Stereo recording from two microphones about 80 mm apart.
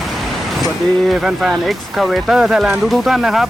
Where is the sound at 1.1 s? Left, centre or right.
Centre.